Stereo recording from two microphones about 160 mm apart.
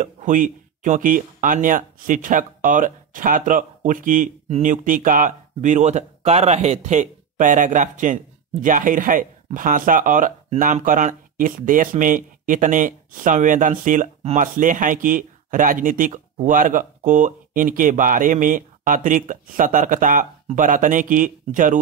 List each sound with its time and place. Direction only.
0.0 s speech: 55° right (ahead or behind)